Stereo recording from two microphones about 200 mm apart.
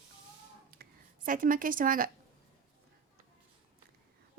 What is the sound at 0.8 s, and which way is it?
Speech, 45° right (ahead or behind).